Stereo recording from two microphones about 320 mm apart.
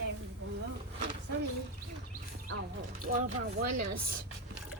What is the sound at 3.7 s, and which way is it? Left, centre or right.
Speech, right.